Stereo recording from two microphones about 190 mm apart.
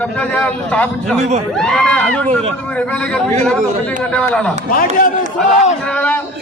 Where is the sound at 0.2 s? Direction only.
5° left (ahead or behind).